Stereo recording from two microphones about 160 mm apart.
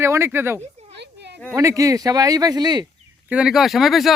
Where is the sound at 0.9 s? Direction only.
90° right.